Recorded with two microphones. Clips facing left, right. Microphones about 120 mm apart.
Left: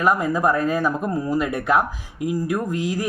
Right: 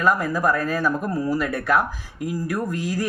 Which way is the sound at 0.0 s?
20° left (ahead or behind).